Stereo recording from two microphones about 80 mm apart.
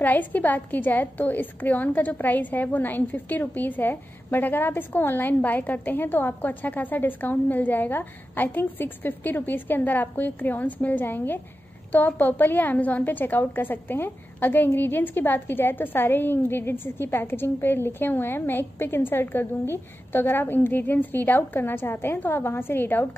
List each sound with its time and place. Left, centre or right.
0.0 s a woman's voice: left